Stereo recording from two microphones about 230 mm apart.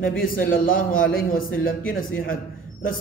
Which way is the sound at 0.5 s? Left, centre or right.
Left.